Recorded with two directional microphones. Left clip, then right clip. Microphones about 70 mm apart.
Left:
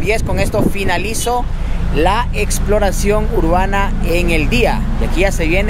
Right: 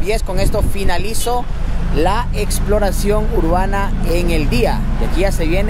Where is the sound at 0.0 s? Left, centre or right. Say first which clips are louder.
Left 3 dB; left.